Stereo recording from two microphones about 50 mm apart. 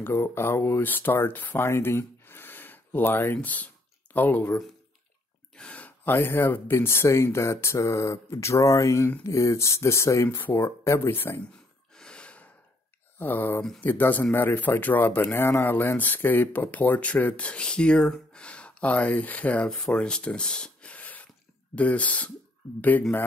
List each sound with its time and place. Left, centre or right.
0.0 s speech: left
0.8 s speech: left
1.6 s a sound: left
3.3 s speech: left
5.5 s a sound: centre
6.0 s speech: left
10.3 s speech: left
11.1 s speech: left
11.9 s gasp: centre
13.2 s speech: left
17.5 s speech: centre
20.9 s a sound: left
21.7 s speech: left